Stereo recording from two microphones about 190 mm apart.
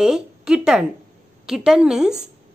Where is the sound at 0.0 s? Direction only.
5° right (ahead or behind).